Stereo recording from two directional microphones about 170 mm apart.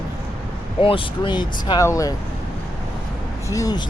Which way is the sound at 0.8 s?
30° left (ahead or behind).